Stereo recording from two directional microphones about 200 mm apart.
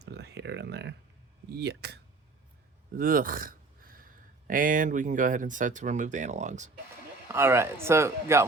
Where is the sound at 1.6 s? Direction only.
55° right (ahead or behind).